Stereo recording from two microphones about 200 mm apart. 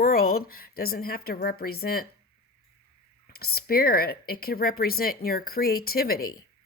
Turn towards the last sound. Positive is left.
turn(degrees=50)  # may be behind; listen again after turning